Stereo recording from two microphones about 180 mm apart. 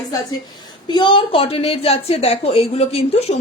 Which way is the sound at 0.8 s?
25° left (ahead or behind).